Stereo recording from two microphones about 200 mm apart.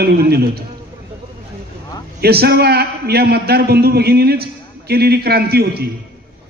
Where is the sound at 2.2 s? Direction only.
50° right (ahead or behind).